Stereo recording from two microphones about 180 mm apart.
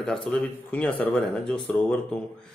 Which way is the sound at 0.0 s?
5° left (ahead or behind).